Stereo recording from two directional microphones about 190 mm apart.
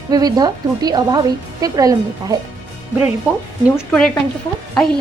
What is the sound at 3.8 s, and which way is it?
Speech, 5° left (ahead or behind).